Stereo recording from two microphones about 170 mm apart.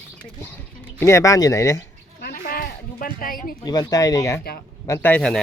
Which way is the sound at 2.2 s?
60° left (ahead or behind).